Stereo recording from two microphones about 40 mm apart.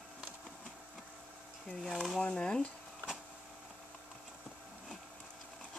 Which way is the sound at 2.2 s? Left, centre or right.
Centre.